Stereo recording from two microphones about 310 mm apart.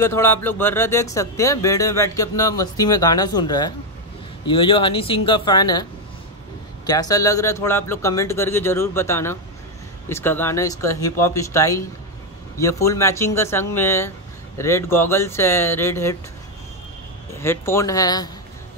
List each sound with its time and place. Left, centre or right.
0.0 s speech: centre
6.9 s speech: centre
17.4 s speech: centre